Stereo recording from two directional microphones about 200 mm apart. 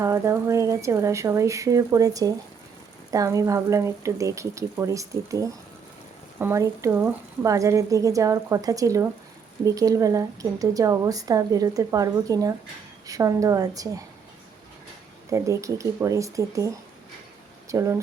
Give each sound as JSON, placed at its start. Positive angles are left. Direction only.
{"t": 0.0, "sound": "a woman's voice", "side_deg": -15}
{"t": 15.3, "sound": "a woman's voice", "side_deg": -15}